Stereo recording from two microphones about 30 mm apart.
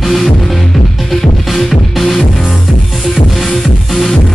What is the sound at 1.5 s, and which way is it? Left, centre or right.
Music, centre.